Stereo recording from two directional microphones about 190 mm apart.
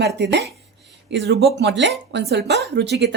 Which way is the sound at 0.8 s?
65° right (ahead or behind).